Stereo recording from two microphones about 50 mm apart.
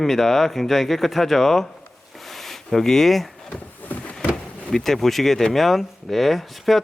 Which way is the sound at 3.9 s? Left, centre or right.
Left.